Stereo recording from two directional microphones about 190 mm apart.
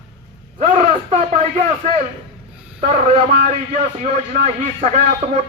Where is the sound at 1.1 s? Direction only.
40° right (ahead or behind).